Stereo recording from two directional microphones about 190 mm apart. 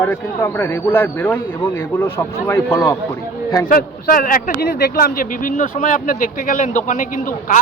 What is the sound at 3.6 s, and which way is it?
A man's voice, 45° left (ahead or behind).